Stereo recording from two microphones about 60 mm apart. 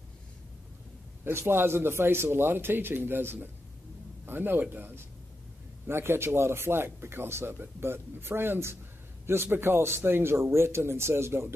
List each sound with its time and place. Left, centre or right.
1.4 s a man's voice: right